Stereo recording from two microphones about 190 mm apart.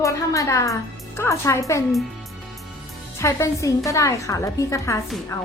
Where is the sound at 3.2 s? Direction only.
15° left (ahead or behind).